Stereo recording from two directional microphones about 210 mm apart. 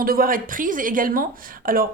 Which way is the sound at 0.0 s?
45° right (ahead or behind).